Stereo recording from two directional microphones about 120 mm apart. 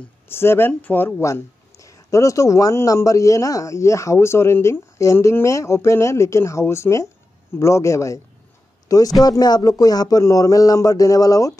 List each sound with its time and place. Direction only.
0.3 s a man's voice: 20° left (ahead or behind)